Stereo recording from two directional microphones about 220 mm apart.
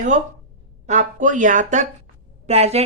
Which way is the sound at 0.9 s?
35° right (ahead or behind).